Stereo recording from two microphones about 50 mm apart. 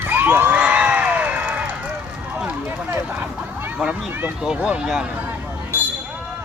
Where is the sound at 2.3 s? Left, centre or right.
Right.